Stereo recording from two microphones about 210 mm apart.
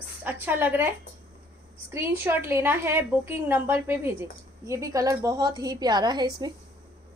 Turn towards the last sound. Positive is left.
turn(degrees=-20)  # may be behind; listen again after turning